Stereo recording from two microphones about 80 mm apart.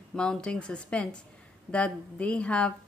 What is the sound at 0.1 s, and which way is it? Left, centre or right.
A woman's voice, centre.